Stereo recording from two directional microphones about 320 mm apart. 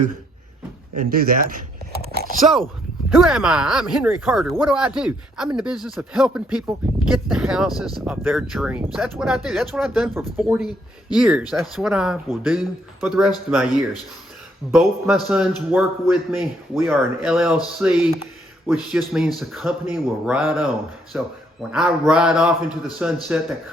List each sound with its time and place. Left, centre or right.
0.9 s speech: right
2.0 s a sound: right
3.2 s speech: centre